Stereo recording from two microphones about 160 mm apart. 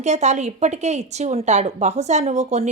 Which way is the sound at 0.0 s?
45° right (ahead or behind).